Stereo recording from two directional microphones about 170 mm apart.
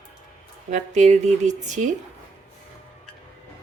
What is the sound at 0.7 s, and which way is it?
Speech, 45° right (ahead or behind).